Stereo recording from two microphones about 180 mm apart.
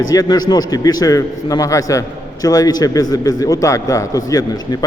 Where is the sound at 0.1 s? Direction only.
20° left (ahead or behind).